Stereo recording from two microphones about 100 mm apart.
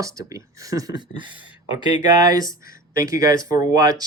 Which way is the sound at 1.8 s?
45° right (ahead or behind).